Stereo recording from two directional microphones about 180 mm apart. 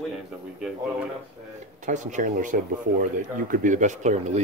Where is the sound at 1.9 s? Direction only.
45° right (ahead or behind).